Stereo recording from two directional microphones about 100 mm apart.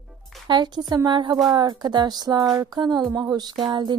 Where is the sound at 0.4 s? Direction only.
45° right (ahead or behind).